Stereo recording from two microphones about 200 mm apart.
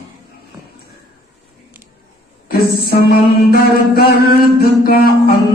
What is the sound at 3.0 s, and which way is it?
Music, 50° left (ahead or behind).